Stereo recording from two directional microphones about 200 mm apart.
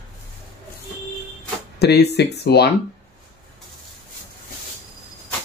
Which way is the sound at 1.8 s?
55° left (ahead or behind).